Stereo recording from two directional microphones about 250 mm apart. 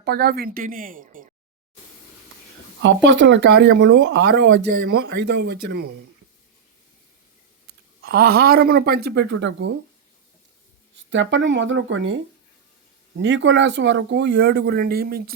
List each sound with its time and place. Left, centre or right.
0.0 s a woman's voice: right
2.8 s speech: right
8.0 s a woman's voice: right
10.9 s speech: right